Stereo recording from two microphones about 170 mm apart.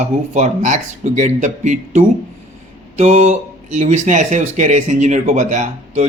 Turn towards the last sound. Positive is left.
turn(degrees=-45)  # may be behind; listen again after turning